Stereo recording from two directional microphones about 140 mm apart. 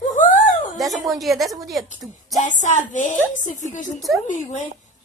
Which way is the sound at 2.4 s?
60° left (ahead or behind).